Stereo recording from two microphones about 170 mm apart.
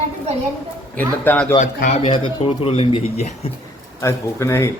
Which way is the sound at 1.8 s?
35° left (ahead or behind).